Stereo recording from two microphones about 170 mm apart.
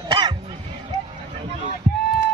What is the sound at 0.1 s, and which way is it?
Music, 30° right (ahead or behind).